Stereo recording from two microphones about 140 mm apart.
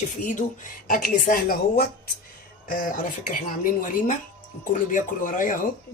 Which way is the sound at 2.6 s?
75° left (ahead or behind).